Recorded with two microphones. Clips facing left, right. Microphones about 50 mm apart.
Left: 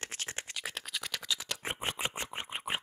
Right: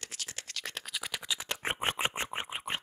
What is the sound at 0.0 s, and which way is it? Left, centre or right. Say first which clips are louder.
Scratch: left 3 dB; left.